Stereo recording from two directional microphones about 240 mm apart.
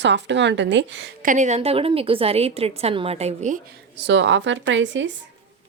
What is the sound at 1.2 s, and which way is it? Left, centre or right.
A woman's voice, right.